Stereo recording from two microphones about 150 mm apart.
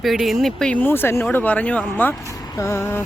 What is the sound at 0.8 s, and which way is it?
Speech, 15° left (ahead or behind).